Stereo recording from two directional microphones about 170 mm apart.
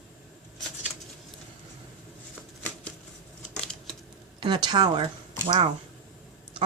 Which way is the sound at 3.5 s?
5° left (ahead or behind).